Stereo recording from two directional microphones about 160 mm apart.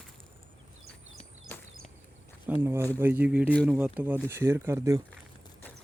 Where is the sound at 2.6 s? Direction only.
15° right (ahead or behind).